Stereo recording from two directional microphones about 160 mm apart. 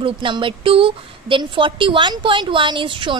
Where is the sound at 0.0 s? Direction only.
30° right (ahead or behind).